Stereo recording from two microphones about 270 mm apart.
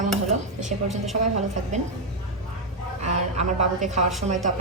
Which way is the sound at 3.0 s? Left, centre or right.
Right.